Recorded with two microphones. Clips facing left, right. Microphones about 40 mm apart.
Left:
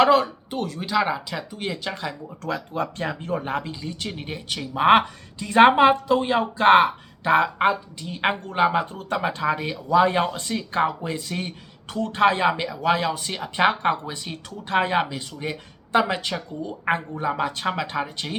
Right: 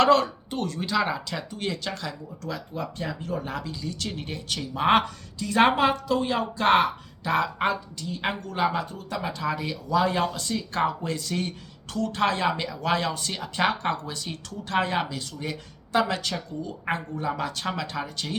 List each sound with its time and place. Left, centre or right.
0.0 s speech: centre
1.9 s speech: left
2.4 s speech: left
3.2 s speech: left
10.6 s speech: centre